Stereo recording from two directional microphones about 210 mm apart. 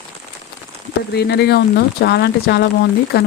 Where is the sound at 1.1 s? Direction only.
50° left (ahead or behind).